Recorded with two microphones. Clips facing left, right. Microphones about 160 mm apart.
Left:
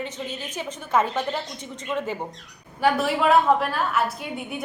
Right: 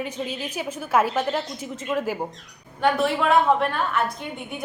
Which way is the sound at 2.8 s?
5° left (ahead or behind).